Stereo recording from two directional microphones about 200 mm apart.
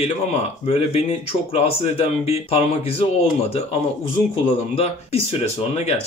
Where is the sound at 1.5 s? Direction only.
30° left (ahead or behind).